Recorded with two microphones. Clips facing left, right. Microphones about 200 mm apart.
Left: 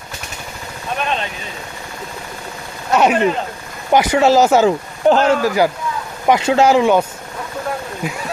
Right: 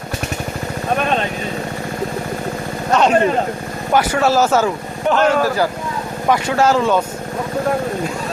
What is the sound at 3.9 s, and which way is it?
Speech, 15° left (ahead or behind).